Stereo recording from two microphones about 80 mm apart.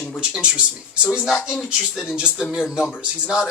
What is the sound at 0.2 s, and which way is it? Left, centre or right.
Speech, centre.